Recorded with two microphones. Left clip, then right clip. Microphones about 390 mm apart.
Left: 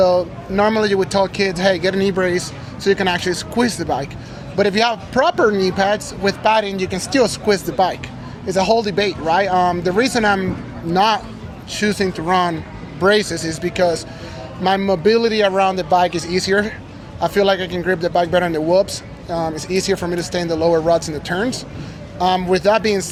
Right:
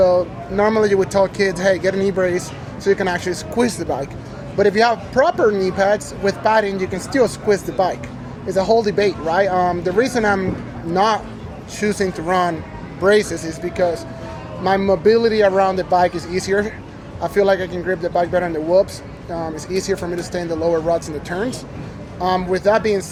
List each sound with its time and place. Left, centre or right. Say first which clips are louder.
0.0 s speech: even; left